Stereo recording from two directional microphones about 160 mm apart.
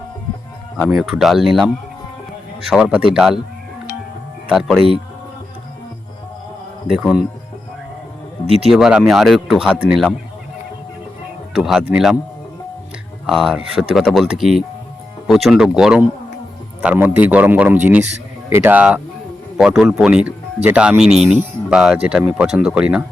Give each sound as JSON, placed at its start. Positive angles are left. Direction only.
{"t": 0.8, "sound": "speech", "side_deg": 0}
{"t": 6.9, "sound": "speech", "side_deg": 0}
{"t": 8.4, "sound": "speech", "side_deg": -40}
{"t": 8.7, "sound": "speech", "side_deg": -5}
{"t": 11.5, "sound": "speech", "side_deg": 0}
{"t": 13.2, "sound": "a man's voice", "side_deg": 0}